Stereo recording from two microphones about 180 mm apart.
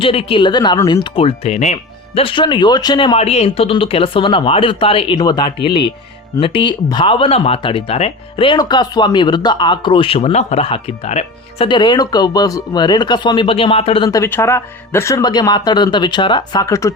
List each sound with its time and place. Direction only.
0.0 s speech: 30° left (ahead or behind)
1.1 s speech: 35° left (ahead or behind)
14.1 s speech: 15° left (ahead or behind)